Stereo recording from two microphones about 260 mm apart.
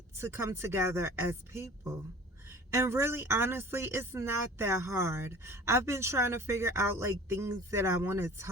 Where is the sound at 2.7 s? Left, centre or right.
Centre.